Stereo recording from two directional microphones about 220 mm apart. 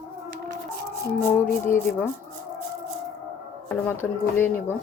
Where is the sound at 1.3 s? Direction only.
10° left (ahead or behind).